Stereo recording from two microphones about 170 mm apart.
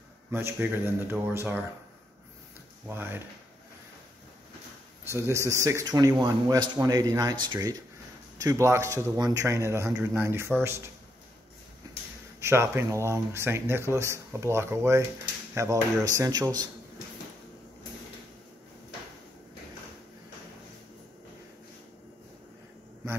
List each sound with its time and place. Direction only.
0.3 s speech: 15° right (ahead or behind)
2.9 s speech: 10° right (ahead or behind)
5.1 s speech: 15° right (ahead or behind)
12.4 s speech: 15° right (ahead or behind)